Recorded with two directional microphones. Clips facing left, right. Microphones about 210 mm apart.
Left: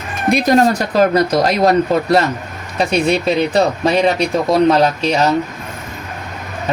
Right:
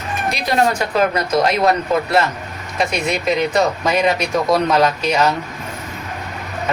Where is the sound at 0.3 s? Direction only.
50° left (ahead or behind); by 5.2 s 30° left (ahead or behind).